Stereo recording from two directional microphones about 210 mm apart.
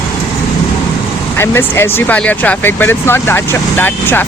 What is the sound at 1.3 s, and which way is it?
Speech, 10° left (ahead or behind).